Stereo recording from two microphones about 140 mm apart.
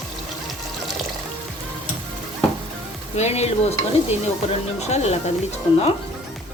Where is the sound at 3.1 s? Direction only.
50° left (ahead or behind).